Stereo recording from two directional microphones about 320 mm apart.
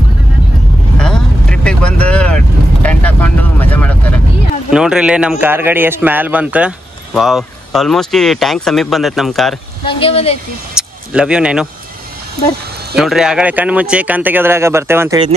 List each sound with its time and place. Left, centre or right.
0.9 s vehicle: centre
4.6 s speech: centre
9.8 s speech: centre
10.7 s a sound: centre
12.9 s speech: centre